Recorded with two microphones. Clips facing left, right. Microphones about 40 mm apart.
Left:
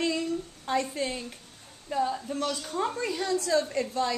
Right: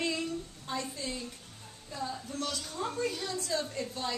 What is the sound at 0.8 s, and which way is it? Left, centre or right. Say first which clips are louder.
Speech: left 6 dB; left.